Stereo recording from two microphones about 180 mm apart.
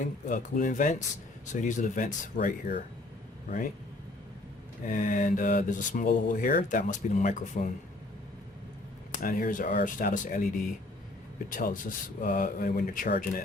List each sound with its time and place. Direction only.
0.0 s speech: 45° left (ahead or behind)
4.8 s speech: 45° left (ahead or behind)
9.2 s speech: 50° left (ahead or behind)